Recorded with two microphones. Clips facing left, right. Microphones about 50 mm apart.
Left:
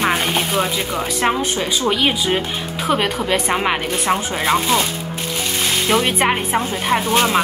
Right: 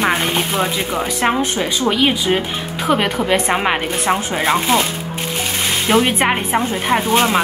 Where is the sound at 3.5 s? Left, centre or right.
Centre.